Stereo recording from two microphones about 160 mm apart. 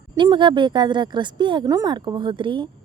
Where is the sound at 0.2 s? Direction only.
30° right (ahead or behind).